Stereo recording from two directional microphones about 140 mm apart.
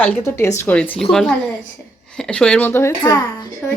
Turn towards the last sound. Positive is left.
turn(degrees=25)  # may be behind; listen again after turning